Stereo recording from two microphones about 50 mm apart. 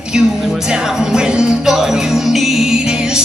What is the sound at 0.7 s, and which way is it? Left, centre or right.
Music, centre.